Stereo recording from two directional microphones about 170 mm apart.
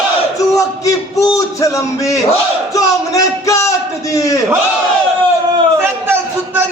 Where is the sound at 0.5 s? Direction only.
20° left (ahead or behind).